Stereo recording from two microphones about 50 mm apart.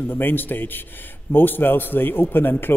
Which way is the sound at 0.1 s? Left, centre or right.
Left.